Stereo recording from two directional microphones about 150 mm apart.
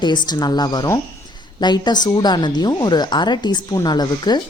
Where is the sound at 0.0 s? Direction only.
30° left (ahead or behind).